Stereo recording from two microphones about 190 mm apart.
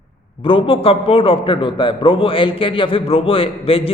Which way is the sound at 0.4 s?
25° left (ahead or behind).